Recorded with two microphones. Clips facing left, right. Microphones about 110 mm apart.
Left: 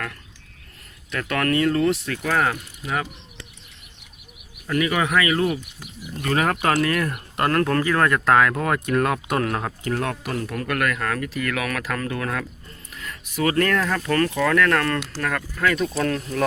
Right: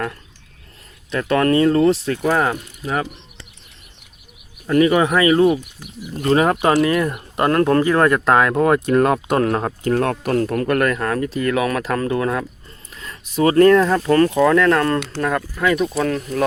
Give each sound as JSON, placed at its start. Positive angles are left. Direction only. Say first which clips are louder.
{"t": 1.1, "sound": "speech", "louder": "right 6 dB", "side_deg": -25}
{"t": 4.6, "sound": "speech", "louder": "right 8 dB", "side_deg": -30}
{"t": 15.6, "sound": "speech", "louder": "right 3 dB", "side_deg": -10}